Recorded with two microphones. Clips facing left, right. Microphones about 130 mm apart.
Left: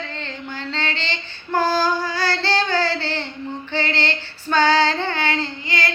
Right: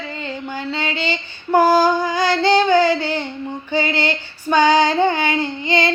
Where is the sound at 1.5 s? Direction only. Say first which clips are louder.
Right 6 dB; 15° right (ahead or behind).